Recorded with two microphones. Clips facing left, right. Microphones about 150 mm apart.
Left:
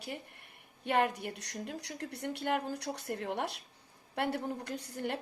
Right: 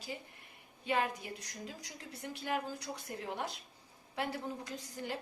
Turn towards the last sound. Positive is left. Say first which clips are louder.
# left 4 dB
turn(degrees=65)  # may be behind; listen again after turning